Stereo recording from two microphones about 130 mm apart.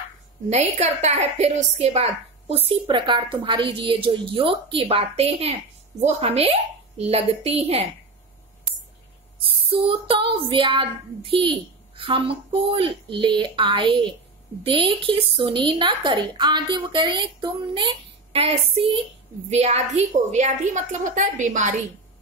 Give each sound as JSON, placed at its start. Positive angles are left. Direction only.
{"t": 0.5, "sound": "a woman's voice", "side_deg": -60}
{"t": 9.4, "sound": "a woman's voice", "side_deg": -45}
{"t": 20.3, "sound": "a woman's voice", "side_deg": -70}